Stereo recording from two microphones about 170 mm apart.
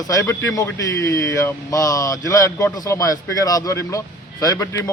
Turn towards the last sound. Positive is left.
turn(degrees=15)  # may be behind; listen again after turning